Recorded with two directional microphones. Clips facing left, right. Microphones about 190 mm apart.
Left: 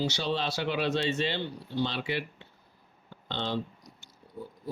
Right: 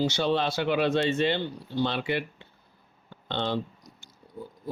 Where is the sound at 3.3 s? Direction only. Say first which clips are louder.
Right 4 dB; 55° right (ahead or behind).